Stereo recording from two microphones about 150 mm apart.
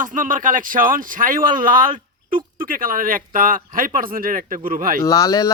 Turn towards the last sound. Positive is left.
turn(degrees=25)  # may be behind; listen again after turning